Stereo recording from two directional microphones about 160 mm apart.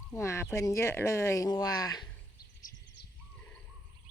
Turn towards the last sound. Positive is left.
turn(degrees=90)